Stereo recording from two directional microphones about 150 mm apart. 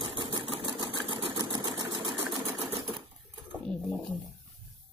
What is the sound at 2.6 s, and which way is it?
Typewriter, 40° right (ahead or behind).